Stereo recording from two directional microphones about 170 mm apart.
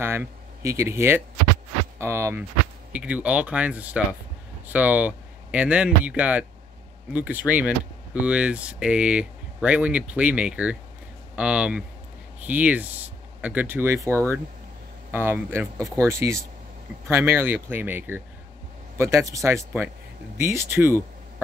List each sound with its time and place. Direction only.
0.0 s speech: 15° right (ahead or behind)